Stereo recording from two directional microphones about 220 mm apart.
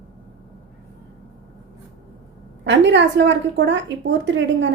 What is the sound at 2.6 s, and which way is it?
A woman's voice, 55° right (ahead or behind).